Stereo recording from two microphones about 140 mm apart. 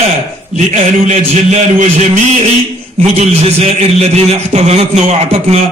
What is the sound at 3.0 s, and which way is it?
A man's voice, 45° right (ahead or behind).